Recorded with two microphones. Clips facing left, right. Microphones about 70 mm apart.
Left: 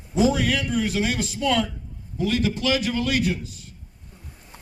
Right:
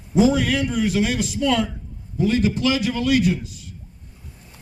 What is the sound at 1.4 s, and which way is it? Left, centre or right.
A man's voice, right.